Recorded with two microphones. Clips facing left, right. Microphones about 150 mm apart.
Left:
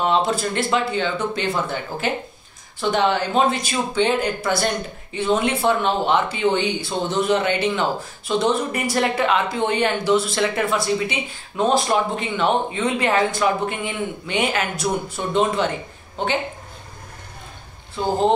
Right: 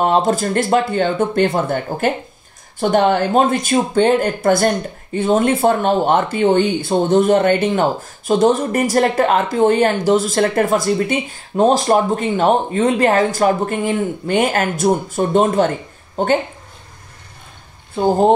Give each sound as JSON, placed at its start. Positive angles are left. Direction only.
{"t": 0.0, "sound": "speech", "side_deg": -45}
{"t": 17.9, "sound": "speech", "side_deg": -50}